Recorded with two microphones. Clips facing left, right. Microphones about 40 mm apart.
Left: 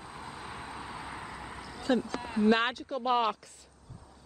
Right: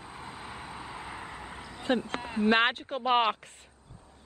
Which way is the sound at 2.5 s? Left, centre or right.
Right.